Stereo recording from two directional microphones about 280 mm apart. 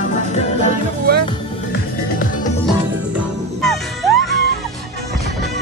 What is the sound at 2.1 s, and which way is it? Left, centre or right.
Music, left.